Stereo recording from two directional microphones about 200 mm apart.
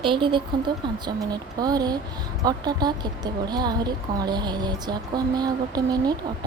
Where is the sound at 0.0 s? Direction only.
25° right (ahead or behind).